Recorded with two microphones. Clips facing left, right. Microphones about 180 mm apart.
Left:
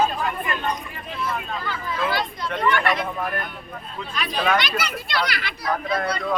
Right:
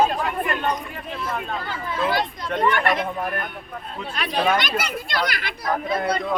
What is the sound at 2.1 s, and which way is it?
Speech, 45° right (ahead or behind).